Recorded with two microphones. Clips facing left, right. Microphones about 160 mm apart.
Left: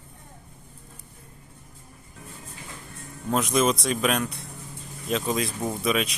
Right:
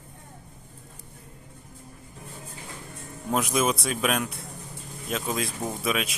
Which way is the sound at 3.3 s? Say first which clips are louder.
Left 2 dB; 5° right (ahead or behind).